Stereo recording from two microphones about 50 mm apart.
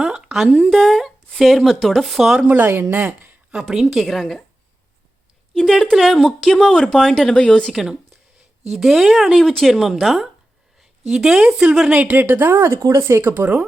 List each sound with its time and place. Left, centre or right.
0.0 s a sound: centre
0.4 s a woman's voice: right
0.7 s speech: centre
2.4 s speech: right
3.5 s speech: centre
5.5 s speech: centre
7.7 s speech: centre
9.4 s speech: centre
11.1 s speech: centre
12.0 s speech: right